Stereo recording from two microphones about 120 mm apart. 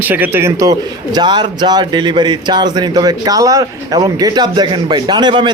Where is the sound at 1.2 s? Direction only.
40° right (ahead or behind).